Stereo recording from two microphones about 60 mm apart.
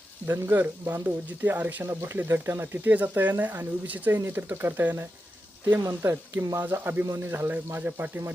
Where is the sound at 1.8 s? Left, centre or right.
Right.